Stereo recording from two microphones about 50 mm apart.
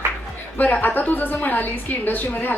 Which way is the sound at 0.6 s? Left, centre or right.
Left.